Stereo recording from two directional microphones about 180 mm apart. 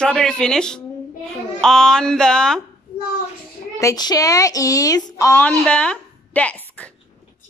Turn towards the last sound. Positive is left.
turn(degrees=5)  # may be behind; listen again after turning